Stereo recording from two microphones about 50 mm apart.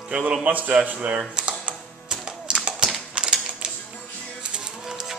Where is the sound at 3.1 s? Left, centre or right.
Centre.